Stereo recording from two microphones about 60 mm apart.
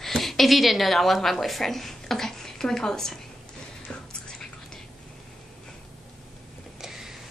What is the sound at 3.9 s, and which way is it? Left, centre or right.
Music, centre.